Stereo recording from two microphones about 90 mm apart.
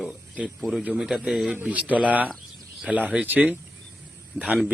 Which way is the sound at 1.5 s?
15° right (ahead or behind).